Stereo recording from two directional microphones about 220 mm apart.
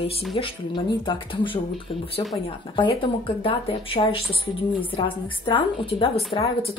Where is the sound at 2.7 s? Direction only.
20° left (ahead or behind).